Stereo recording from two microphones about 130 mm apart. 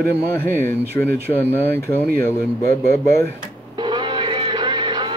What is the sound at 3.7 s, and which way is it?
Music, 35° right (ahead or behind).